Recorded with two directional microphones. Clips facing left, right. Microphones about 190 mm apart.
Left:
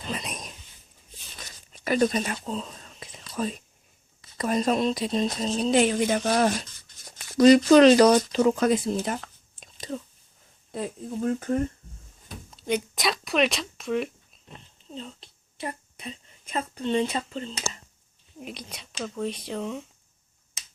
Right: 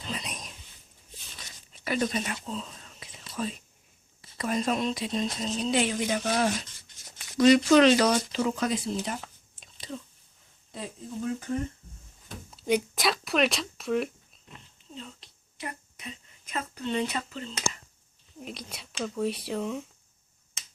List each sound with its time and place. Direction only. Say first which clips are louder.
0.0 s a sound: left 3 dB; 50° left (ahead or behind)
1.4 s whispering: left 4 dB; 45° left (ahead or behind)
3.3 s speech: left 4 dB; 45° left (ahead or behind)
9.6 s whispering: left 5 dB; 45° left (ahead or behind)
10.7 s speech: left 6 dB; 50° left (ahead or behind)
12.5 s speech: right 1 dB; 5° right (ahead or behind)
14.4 s a sound: left 3 dB; 30° left (ahead or behind)
18.3 s speech: left 1 dB; 5° left (ahead or behind)